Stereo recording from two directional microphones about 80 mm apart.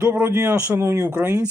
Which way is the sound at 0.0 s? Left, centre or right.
Right.